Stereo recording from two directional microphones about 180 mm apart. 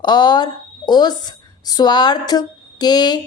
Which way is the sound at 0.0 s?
25° left (ahead or behind).